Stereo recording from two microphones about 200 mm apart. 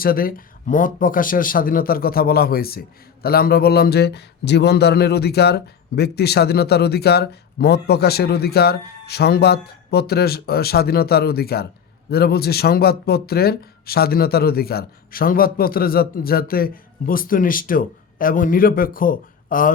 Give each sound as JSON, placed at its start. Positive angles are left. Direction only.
{"t": 0.0, "sound": "speech", "side_deg": 45}